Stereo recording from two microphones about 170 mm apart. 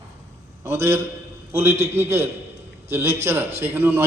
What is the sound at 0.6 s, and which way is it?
A man's voice, 15° right (ahead or behind).